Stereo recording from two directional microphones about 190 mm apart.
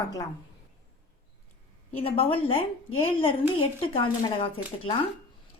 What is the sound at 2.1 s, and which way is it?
A woman's voice, 30° left (ahead or behind).